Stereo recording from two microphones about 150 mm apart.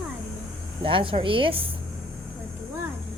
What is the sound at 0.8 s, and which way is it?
Speech, 35° right (ahead or behind).